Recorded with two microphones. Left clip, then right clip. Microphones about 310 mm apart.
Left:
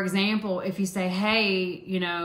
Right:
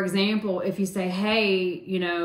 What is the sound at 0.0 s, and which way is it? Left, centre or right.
A woman's voice, centre.